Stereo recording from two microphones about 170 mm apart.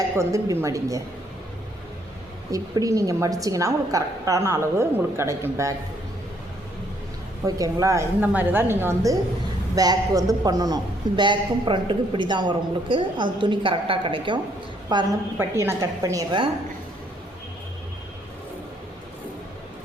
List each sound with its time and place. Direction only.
0.2 s a woman's voice: 20° right (ahead or behind)
2.5 s a woman's voice: 20° right (ahead or behind)
7.4 s a woman's voice: 20° right (ahead or behind)